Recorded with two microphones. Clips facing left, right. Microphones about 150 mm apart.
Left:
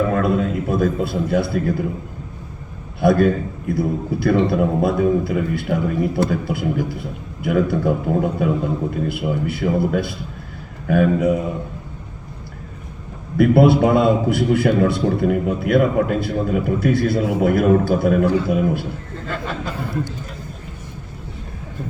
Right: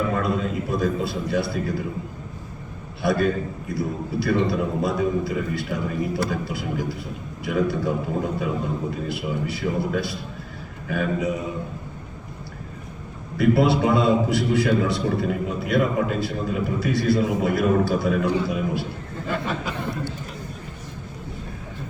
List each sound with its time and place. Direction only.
0.1 s a sound: 55° left (ahead or behind)
3.0 s a man's voice: 55° left (ahead or behind)
13.3 s a man's voice: 55° left (ahead or behind)